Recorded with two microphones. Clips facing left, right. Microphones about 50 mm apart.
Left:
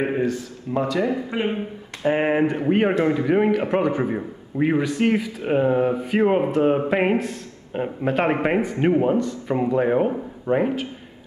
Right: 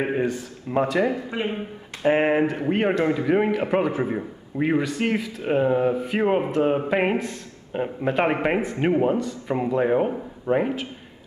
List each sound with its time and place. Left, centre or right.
0.1 s speech: centre
1.3 s speech: centre
2.2 s a man's voice: centre